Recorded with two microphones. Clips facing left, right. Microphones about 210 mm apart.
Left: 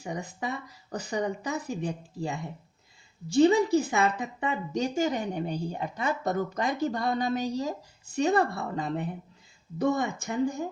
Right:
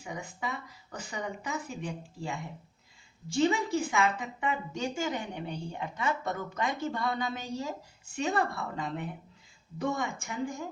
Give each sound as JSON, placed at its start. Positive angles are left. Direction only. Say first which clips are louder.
{"t": 0.0, "sound": "a woman's voice", "louder": "left 4 dB", "side_deg": 40}